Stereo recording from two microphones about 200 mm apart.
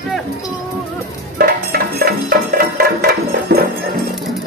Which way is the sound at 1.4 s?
50° right (ahead or behind).